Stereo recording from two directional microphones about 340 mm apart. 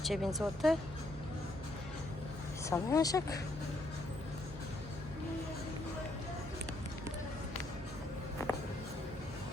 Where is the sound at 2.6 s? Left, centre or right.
Centre.